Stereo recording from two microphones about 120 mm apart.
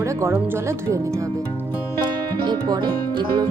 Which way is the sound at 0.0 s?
25° right (ahead or behind).